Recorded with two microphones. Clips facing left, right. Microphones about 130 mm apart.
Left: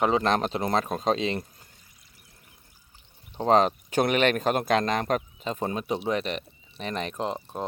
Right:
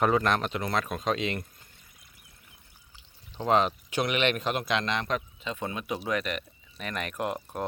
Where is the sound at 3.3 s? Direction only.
35° left (ahead or behind).